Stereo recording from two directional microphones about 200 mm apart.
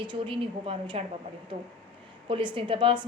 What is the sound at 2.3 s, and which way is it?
Speech, 25° right (ahead or behind).